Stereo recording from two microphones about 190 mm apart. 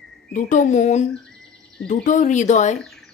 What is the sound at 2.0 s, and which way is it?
Speech, 40° left (ahead or behind).